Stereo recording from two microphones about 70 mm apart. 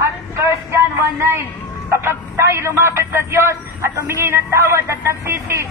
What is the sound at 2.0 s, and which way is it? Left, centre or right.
Speech, right.